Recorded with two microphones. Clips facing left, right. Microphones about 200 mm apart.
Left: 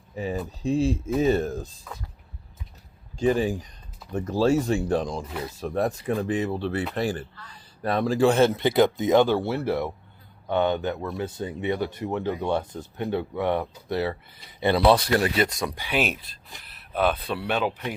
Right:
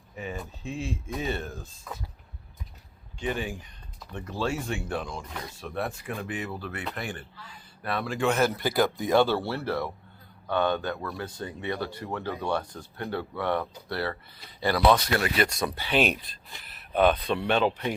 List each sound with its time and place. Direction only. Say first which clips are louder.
0.2 s speech: left 7 dB; 35° left (ahead or behind)
3.2 s speech: left 9 dB; 35° left (ahead or behind); by 14.2 s 15° left (ahead or behind)
14.6 s speech: left 3 dB; 25° left (ahead or behind)
15.4 s speech: even; 15° left (ahead or behind)